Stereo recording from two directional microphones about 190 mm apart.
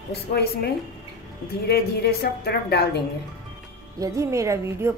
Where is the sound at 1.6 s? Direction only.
55° left (ahead or behind).